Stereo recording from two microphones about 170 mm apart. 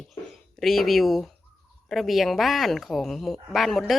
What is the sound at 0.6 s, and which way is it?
A woman's voice, centre (ahead or behind).